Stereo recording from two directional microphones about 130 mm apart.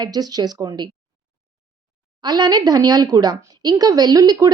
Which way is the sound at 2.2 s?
35° right (ahead or behind).